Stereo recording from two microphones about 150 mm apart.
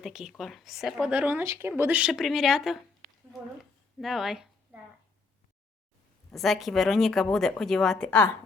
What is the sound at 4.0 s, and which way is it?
Speech, centre (ahead or behind).